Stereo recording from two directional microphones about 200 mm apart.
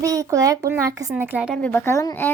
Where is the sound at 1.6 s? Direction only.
10° left (ahead or behind).